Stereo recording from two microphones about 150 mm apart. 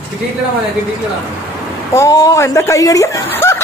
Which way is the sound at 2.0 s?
20° left (ahead or behind).